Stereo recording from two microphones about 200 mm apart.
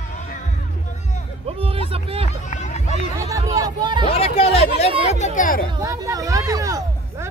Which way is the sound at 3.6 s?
20° right (ahead or behind).